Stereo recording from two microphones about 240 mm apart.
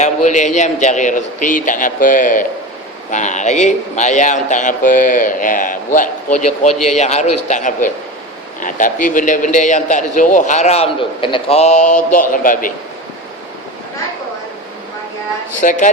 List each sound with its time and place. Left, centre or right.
0.3 s a man's voice: left
15.6 s a man's voice: left